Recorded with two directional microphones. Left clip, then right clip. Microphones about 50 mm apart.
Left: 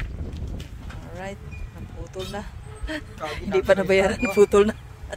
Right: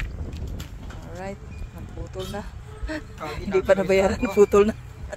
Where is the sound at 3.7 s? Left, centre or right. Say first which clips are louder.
Even; left.